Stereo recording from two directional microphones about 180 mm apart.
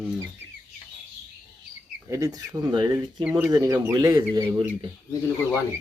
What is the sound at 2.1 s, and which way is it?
Speech, 20° right (ahead or behind).